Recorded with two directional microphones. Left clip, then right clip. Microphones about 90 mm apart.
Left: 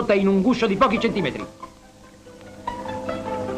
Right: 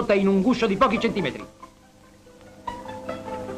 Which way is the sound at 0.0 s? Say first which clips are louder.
Left 1 dB; 35° right (ahead or behind).